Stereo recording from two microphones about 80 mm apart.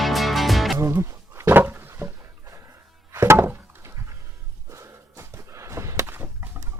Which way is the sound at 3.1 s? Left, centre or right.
Right.